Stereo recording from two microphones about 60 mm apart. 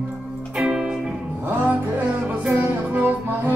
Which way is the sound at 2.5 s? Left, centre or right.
Right.